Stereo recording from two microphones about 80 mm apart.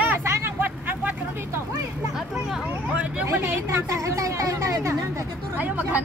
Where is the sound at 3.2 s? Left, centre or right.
Right.